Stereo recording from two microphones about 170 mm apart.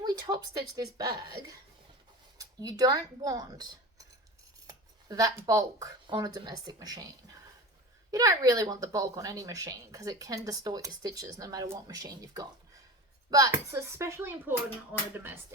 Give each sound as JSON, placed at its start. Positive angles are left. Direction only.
{"t": 0.0, "sound": "speech", "side_deg": -25}
{"t": 8.1, "sound": "speech", "side_deg": -20}